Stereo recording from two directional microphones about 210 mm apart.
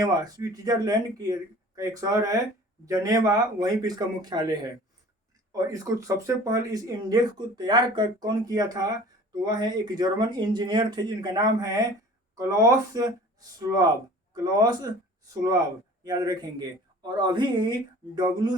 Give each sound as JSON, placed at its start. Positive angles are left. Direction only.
{"t": 0.0, "sound": "speech", "side_deg": -20}